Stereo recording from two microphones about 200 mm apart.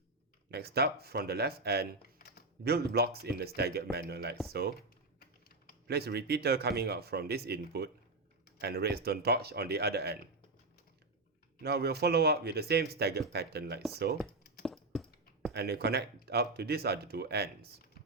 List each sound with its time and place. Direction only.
0.5 s speech: 55° right (ahead or behind)
2.0 s typing: 50° left (ahead or behind)
2.6 s speech: 50° right (ahead or behind)
5.9 s speech: 55° right (ahead or behind)
11.6 s speech: 55° right (ahead or behind)
14.6 s computer keyboard: centre (ahead or behind)
15.5 s speech: 55° right (ahead or behind)